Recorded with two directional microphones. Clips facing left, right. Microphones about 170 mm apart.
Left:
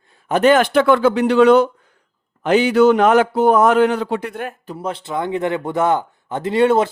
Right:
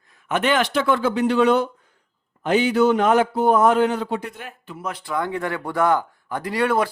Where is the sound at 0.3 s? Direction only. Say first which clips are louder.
Left 7 dB; 40° left (ahead or behind); by 4.5 s 60° left (ahead or behind).